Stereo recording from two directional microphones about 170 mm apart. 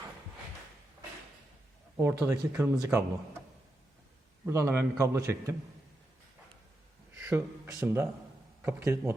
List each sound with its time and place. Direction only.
2.0 s a man's voice: 15° right (ahead or behind)
4.4 s a man's voice: 15° right (ahead or behind)
7.2 s a man's voice: 15° right (ahead or behind)